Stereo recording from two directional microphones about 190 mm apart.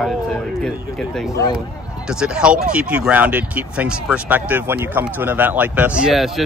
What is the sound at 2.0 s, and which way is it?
Speech, 5° right (ahead or behind).